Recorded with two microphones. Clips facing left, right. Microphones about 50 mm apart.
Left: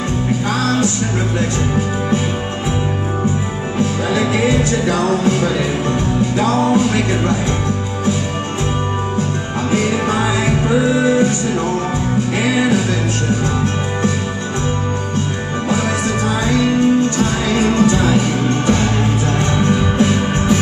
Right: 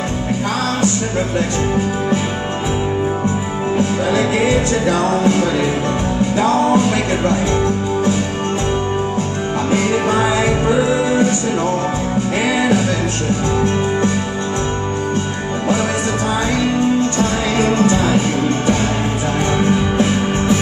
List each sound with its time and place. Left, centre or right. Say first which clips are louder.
4.8 s music: right 1 dB; right
10.0 s music: right 2 dB; centre
12.5 s music: even; centre
19.7 s music: left 1 dB; centre